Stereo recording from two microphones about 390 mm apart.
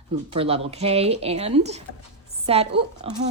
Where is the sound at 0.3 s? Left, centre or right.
Centre.